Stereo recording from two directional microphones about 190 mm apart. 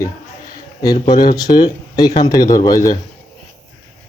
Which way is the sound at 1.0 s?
20° left (ahead or behind).